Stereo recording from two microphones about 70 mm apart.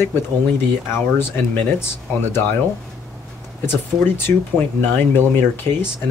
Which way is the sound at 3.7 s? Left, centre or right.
Left.